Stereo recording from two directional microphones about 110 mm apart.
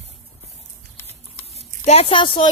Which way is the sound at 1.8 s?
70° left (ahead or behind).